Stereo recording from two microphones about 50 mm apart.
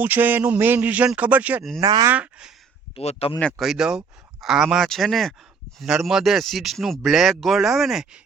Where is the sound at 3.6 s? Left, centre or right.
Centre.